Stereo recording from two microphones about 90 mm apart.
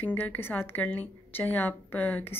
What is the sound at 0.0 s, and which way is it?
Speech, 20° left (ahead or behind).